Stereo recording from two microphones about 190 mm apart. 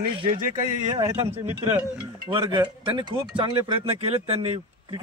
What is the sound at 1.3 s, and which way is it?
Speech, 30° right (ahead or behind).